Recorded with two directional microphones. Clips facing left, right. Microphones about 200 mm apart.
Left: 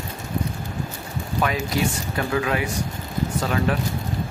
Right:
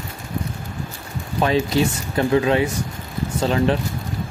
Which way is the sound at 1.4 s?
30° right (ahead or behind).